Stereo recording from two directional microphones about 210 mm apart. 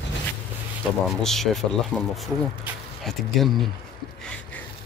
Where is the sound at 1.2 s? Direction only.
Centre (ahead or behind).